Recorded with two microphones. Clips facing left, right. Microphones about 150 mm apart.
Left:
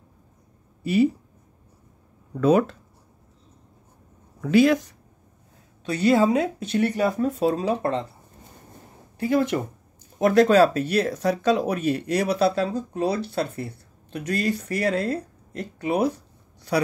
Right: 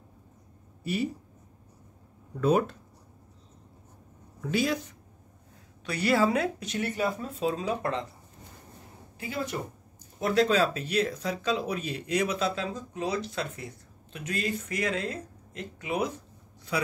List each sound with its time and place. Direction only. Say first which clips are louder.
4.5 s speech: left 10 dB; 65° left (ahead or behind)
5.9 s speech: left 6 dB; 20° left (ahead or behind)
6.8 s speech: left 8 dB; 60° left (ahead or behind)
7.4 s speech: left 4 dB; 35° left (ahead or behind)
9.3 s speech: left 11 dB; 65° left (ahead or behind)
10.1 s speech: left 8 dB; 55° left (ahead or behind)
12.1 s speech: left 4 dB; 35° left (ahead or behind)